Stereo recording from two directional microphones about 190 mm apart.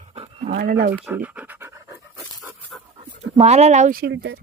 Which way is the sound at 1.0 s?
10° right (ahead or behind).